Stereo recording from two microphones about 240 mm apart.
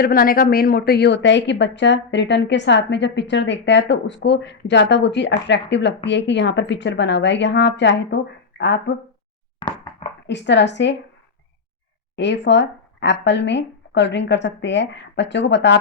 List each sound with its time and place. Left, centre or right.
0.0 s speech: left
10.2 s speech: left
12.1 s speech: left